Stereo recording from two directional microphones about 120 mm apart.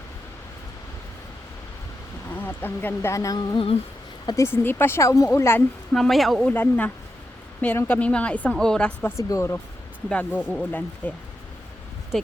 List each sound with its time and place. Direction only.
2.3 s speech: 15° left (ahead or behind); by 3.7 s 35° left (ahead or behind)
4.3 s speech: 25° left (ahead or behind)
5.9 s speech: centre (ahead or behind)
6.5 s speech: 15° left (ahead or behind)
9.0 s speech: 20° left (ahead or behind)
10.1 s speech: 10° left (ahead or behind)